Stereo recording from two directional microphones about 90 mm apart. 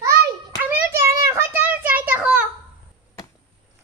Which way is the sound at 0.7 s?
30° right (ahead or behind).